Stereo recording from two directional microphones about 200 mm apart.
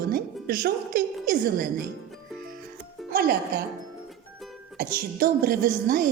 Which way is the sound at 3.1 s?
50° right (ahead or behind).